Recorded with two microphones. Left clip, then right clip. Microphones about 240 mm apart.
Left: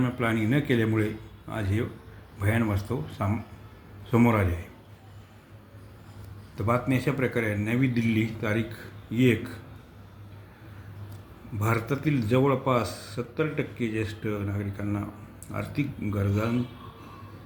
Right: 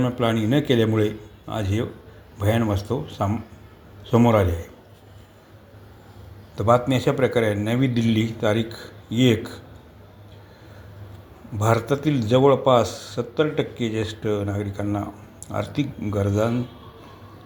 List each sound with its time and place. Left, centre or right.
0.0 s a man's voice: centre
6.6 s a man's voice: centre
11.6 s a man's voice: centre